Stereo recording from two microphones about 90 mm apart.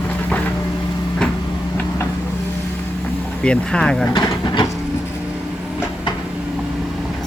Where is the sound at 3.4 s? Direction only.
10° left (ahead or behind).